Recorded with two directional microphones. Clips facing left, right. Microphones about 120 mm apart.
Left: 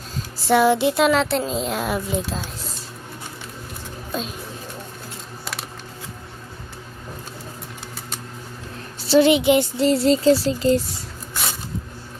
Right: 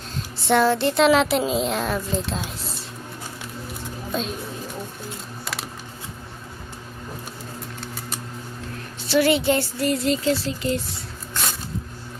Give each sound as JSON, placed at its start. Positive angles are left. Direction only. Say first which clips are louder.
{"t": 0.4, "sound": "speech", "louder": "left 2 dB", "side_deg": 10}
{"t": 4.1, "sound": "speech", "louder": "right 1 dB", "side_deg": 5}
{"t": 9.0, "sound": "speech", "louder": "left 4 dB", "side_deg": 25}
{"t": 11.3, "sound": "a sound", "louder": "even", "side_deg": 10}